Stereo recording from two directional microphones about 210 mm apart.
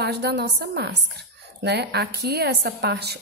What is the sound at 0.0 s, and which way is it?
A woman's voice, 50° right (ahead or behind).